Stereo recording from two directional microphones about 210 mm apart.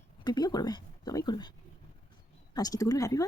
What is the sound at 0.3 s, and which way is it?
Speech, 20° left (ahead or behind).